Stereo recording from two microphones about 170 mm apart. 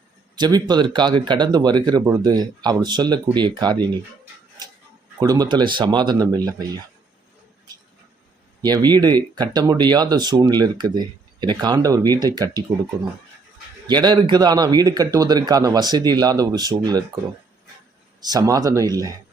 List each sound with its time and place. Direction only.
0.3 s speech: 25° right (ahead or behind)
5.2 s speech: 20° right (ahead or behind)
8.6 s speech: 25° right (ahead or behind)
13.8 s speech: 25° right (ahead or behind)
18.3 s speech: 20° right (ahead or behind)